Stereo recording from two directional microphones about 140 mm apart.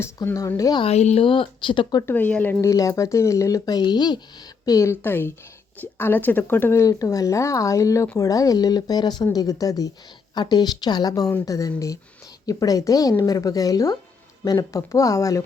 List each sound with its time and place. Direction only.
0.0 s speech: 20° left (ahead or behind)
0.8 s speech: 50° left (ahead or behind); by 2.0 s 30° left (ahead or behind)
2.0 s speech: 10° left (ahead or behind)